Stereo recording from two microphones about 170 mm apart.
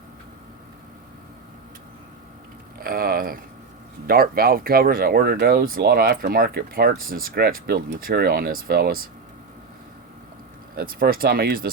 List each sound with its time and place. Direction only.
2.7 s speech: 60° right (ahead or behind)
10.8 s speech: 60° right (ahead or behind)